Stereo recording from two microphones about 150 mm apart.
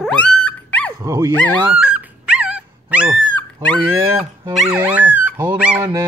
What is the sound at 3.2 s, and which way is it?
Dog, 5° left (ahead or behind).